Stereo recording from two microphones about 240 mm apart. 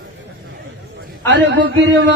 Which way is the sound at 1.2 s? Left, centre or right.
Right.